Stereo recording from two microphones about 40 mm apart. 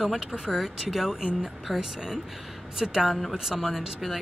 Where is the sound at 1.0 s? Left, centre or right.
Centre.